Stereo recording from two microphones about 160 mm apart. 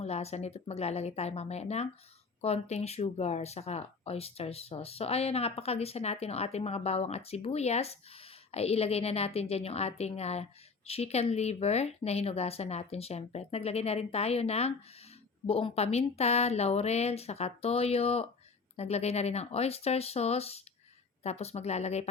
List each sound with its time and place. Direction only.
0.0 s a woman's voice: 40° left (ahead or behind)